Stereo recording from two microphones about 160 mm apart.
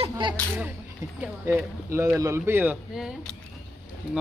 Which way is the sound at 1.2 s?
15° right (ahead or behind).